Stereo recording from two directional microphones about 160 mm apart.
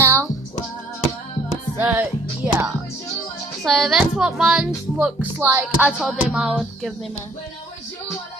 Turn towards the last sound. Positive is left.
turn(degrees=0)  # may be behind; listen again after turning